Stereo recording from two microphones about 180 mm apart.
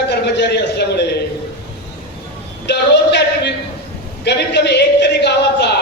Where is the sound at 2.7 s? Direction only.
70° left (ahead or behind).